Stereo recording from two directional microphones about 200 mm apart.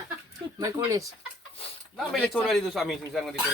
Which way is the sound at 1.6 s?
30° left (ahead or behind).